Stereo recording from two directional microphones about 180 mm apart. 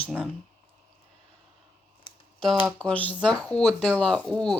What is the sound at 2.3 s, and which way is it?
Speech, centre (ahead or behind).